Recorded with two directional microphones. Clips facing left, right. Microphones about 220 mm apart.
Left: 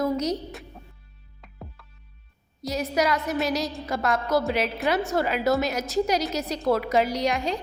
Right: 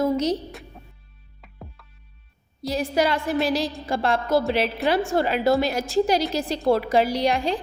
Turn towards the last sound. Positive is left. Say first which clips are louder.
# right 3 dB
turn(degrees=-30)  # may be behind; listen again after turning